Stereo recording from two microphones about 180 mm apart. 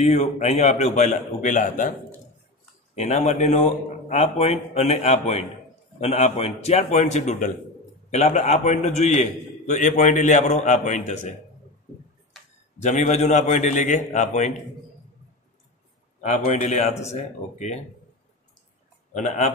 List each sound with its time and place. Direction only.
0.0 s a man's voice: 40° left (ahead or behind)
3.0 s a man's voice: 40° left (ahead or behind)
12.8 s a man's voice: 40° left (ahead or behind)
16.2 s a man's voice: 40° left (ahead or behind)
19.1 s speech: 40° left (ahead or behind)